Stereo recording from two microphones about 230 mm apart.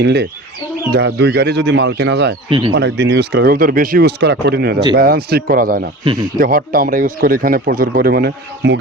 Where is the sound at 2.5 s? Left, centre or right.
Right.